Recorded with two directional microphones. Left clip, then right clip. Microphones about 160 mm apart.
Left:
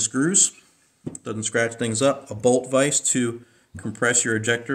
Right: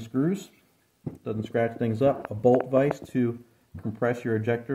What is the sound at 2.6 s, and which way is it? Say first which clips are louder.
Speech: left 3 dB; 40° right (ahead or behind).